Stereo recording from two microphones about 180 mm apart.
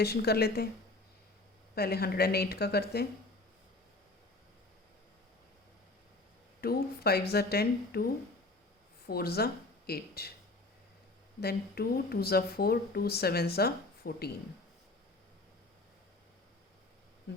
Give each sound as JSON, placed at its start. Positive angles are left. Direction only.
{"t": 0.0, "sound": "speech", "side_deg": 60}
{"t": 1.7, "sound": "speech", "side_deg": 60}
{"t": 6.6, "sound": "speech", "side_deg": 60}
{"t": 11.3, "sound": "speech", "side_deg": 60}